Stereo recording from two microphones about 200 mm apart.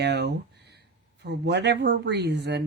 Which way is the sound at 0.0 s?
60° right (ahead or behind).